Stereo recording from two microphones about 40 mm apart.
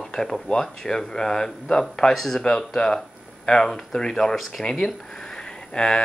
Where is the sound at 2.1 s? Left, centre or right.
Centre.